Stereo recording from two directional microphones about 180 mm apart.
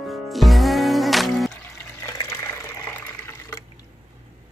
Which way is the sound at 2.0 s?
15° left (ahead or behind).